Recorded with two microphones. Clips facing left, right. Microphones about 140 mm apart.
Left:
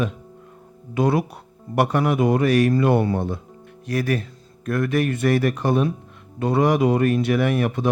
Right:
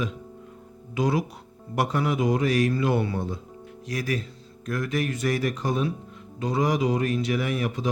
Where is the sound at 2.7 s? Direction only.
55° left (ahead or behind).